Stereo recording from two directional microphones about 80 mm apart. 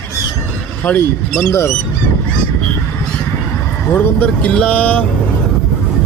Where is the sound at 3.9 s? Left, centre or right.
Left.